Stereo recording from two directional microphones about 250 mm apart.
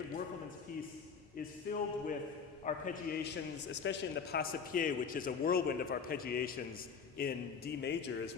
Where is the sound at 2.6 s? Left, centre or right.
Left.